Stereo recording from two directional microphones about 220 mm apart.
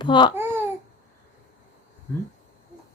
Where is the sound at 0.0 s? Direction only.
20° left (ahead or behind).